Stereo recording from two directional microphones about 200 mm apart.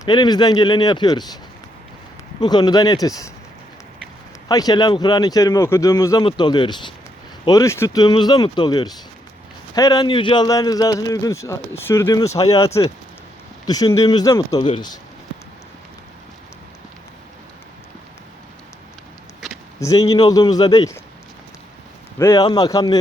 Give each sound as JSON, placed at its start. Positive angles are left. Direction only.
{"t": 0.0, "sound": "a man's voice", "side_deg": 20}
{"t": 2.4, "sound": "a man's voice", "side_deg": 20}
{"t": 4.4, "sound": "a man's voice", "side_deg": 20}
{"t": 19.8, "sound": "a man's voice", "side_deg": 15}
{"t": 22.2, "sound": "a man's voice", "side_deg": 15}